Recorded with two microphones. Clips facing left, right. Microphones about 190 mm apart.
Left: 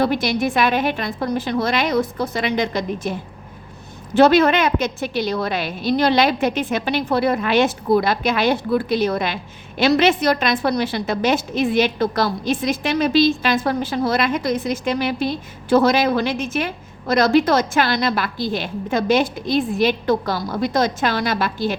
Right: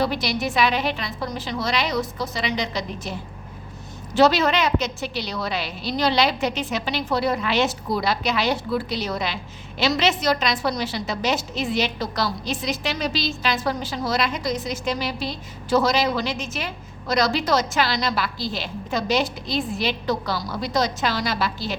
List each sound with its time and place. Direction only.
0.0 s a woman's voice: 50° left (ahead or behind)